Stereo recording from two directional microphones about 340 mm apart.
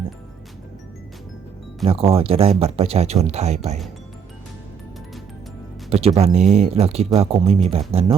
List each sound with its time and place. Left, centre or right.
1.8 s speech: centre
5.9 s speech: centre